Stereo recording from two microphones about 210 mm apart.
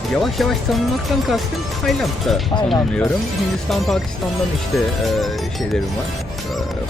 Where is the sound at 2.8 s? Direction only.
10° left (ahead or behind).